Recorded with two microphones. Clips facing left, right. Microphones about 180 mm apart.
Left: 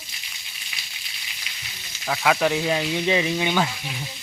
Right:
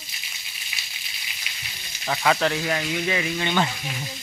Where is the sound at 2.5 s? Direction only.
20° left (ahead or behind).